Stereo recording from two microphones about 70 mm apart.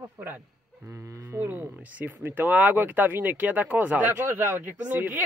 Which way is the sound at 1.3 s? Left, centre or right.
Right.